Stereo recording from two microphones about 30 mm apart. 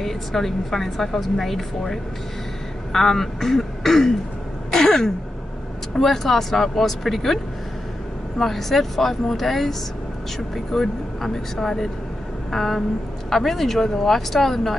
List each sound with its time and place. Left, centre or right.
0.0 s speech: centre
4.7 s throat clearing: centre
5.9 s speech: centre
8.4 s speech: centre
12.4 s vehicle: centre
13.3 s speech: centre